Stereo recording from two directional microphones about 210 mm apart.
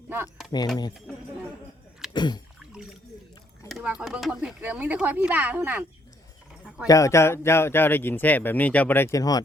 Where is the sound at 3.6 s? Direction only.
5° right (ahead or behind).